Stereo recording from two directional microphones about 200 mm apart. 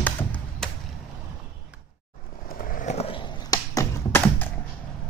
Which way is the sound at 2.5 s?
45° left (ahead or behind).